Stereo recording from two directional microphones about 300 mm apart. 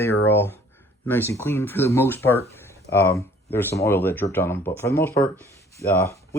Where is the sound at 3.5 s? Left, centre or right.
Centre.